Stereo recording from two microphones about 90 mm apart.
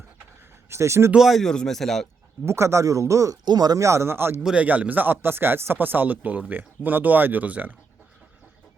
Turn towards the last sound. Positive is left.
turn(degrees=-20)  # may be behind; listen again after turning